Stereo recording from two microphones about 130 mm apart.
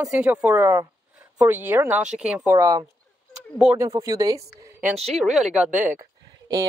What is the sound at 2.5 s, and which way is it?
Speech, 25° right (ahead or behind).